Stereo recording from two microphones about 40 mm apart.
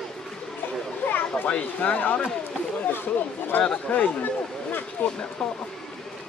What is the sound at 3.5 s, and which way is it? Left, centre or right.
Speech, left.